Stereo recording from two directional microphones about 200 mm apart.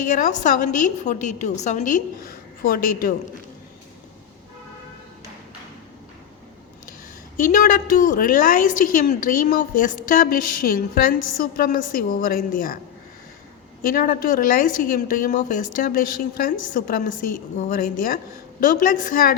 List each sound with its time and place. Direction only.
0.1 s a woman's voice: 40° left (ahead or behind)
7.3 s a woman's voice: 40° left (ahead or behind)
13.8 s a woman's voice: 45° left (ahead or behind)